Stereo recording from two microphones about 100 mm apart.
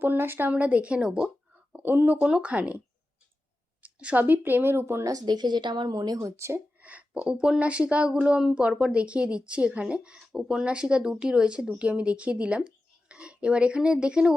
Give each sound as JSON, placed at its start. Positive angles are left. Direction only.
{"t": 0.0, "sound": "speech", "side_deg": -20}
{"t": 1.7, "sound": "speech", "side_deg": -20}
{"t": 3.8, "sound": "a woman's voice", "side_deg": -15}
{"t": 6.1, "sound": "speech", "side_deg": -30}
{"t": 6.8, "sound": "speech", "side_deg": -15}